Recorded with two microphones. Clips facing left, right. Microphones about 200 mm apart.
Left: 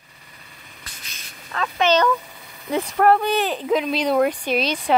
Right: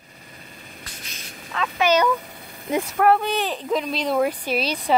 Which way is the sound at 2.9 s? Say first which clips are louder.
Left 2 dB; centre (ahead or behind).